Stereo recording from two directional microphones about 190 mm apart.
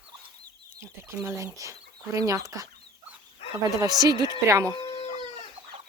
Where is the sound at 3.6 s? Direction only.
20° right (ahead or behind).